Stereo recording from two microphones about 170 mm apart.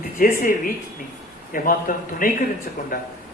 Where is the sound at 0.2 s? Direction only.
55° left (ahead or behind).